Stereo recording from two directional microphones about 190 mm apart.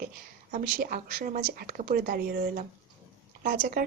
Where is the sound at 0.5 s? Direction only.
45° right (ahead or behind).